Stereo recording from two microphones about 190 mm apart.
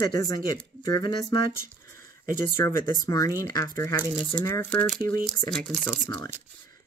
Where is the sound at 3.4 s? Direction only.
15° left (ahead or behind).